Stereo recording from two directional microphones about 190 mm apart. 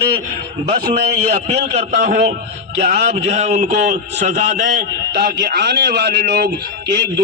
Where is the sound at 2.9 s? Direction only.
40° right (ahead or behind).